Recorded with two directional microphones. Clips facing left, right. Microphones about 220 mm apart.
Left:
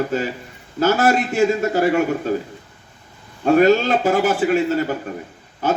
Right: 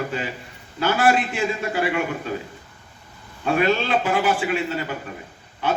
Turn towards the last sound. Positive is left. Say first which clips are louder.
# left 4 dB
turn(degrees=45)  # may be behind; listen again after turning